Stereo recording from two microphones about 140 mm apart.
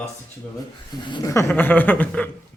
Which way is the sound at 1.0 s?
30° left (ahead or behind).